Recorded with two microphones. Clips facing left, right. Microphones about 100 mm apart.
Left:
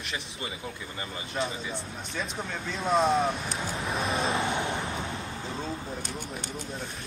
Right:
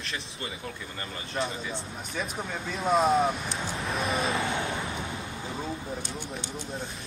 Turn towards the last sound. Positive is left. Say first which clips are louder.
# even
turn(degrees=40)  # may be behind; listen again after turning